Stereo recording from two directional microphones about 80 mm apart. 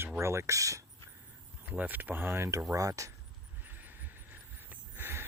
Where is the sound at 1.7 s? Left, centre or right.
Right.